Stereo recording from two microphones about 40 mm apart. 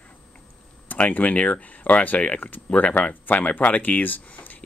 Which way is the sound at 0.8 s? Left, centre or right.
Left.